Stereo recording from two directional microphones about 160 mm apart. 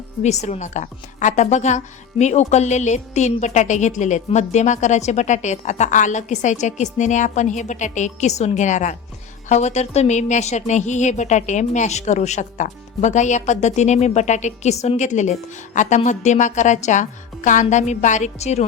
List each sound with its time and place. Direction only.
0.2 s a woman's voice: 45° left (ahead or behind)